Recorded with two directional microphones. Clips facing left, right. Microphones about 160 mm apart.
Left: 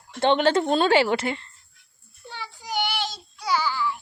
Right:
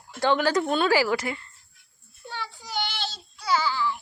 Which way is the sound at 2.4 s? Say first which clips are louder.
Left 4 dB; 10° left (ahead or behind).